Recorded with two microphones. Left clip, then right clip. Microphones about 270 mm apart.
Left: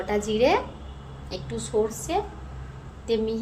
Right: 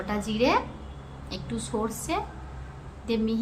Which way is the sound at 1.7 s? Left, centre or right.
Right.